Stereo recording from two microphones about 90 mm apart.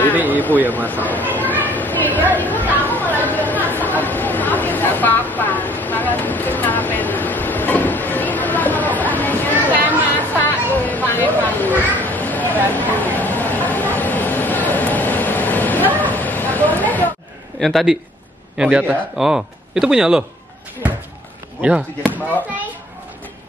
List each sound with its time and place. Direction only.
0.3 s speech: 20° left (ahead or behind)
0.7 s a sound: 20° left (ahead or behind)
2.3 s speech: 20° left (ahead or behind)
2.8 s chatter: 20° left (ahead or behind)
10.3 s a sound: 20° left (ahead or behind)
17.6 s a man's voice: 5° left (ahead or behind)
18.6 s a man's voice: 10° right (ahead or behind)
21.5 s speech: 15° right (ahead or behind)